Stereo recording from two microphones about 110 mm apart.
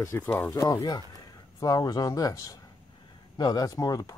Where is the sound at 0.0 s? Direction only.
20° left (ahead or behind).